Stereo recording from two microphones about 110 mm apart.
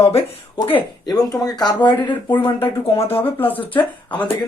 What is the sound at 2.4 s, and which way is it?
Speech, 60° left (ahead or behind).